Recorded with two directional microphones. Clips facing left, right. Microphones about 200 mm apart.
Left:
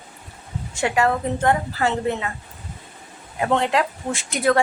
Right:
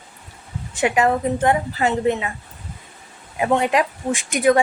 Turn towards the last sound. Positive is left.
turn(degrees=-15)  # may be behind; listen again after turning